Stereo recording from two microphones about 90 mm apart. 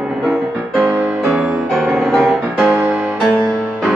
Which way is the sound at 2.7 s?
30° right (ahead or behind).